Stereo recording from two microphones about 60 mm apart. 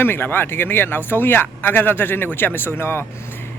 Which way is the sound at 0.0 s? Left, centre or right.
Left.